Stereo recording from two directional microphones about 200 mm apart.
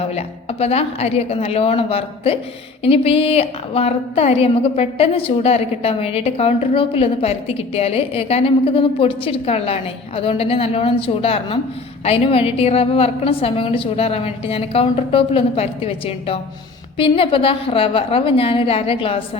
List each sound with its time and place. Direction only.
0.0 s a woman's voice: 30° left (ahead or behind)